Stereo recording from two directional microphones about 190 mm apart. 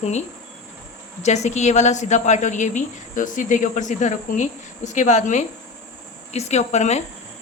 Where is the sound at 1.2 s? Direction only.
35° left (ahead or behind).